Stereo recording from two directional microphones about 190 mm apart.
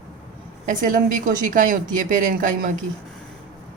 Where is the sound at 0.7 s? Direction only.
45° right (ahead or behind).